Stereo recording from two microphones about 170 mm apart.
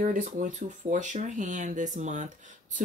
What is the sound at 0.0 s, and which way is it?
Speech, 45° right (ahead or behind).